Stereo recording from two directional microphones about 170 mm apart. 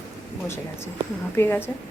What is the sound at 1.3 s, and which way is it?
Speech, 15° left (ahead or behind).